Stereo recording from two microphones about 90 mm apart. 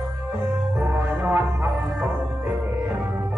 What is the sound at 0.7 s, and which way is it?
Music, 20° right (ahead or behind).